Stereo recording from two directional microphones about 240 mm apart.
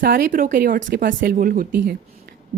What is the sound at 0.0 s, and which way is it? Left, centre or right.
A woman's voice, right.